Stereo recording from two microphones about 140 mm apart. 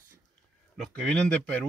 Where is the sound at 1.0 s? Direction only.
5° left (ahead or behind).